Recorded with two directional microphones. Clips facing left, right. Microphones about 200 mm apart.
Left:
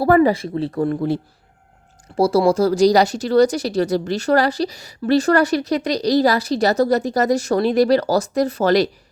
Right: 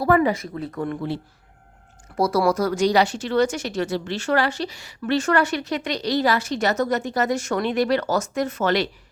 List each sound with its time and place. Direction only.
0.0 s speech: 35° left (ahead or behind)
2.1 s speech: 30° left (ahead or behind)